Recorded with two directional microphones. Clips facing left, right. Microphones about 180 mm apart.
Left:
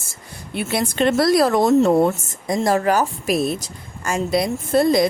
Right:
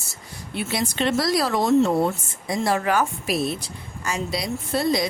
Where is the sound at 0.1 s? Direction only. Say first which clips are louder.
Left 3 dB; 55° left (ahead or behind).